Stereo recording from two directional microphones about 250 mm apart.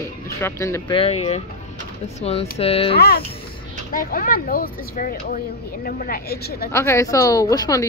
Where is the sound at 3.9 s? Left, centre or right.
Left.